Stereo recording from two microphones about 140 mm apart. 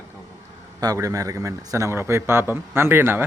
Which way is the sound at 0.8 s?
25° right (ahead or behind).